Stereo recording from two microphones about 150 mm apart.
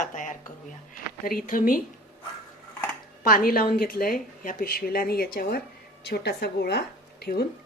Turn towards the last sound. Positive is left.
turn(degrees=90)